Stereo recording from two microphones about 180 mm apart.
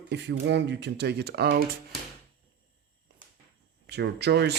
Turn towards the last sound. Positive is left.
turn(degrees=-70)  # may be behind; listen again after turning